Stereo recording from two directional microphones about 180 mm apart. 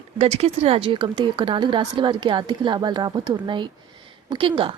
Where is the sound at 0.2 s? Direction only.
35° right (ahead or behind).